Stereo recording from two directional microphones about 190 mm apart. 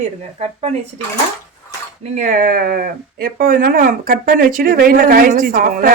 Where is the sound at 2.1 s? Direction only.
45° right (ahead or behind).